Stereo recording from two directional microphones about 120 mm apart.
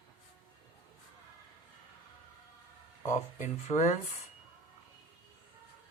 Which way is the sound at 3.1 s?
80° left.